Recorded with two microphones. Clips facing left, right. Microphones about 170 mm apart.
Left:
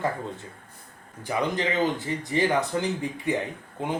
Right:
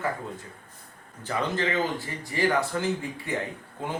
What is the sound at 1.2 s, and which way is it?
Speech, 15° left (ahead or behind).